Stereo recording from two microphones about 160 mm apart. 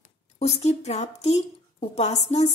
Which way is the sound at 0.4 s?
40° left (ahead or behind).